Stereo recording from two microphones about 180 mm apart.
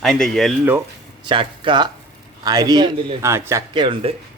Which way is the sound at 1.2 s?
25° right (ahead or behind).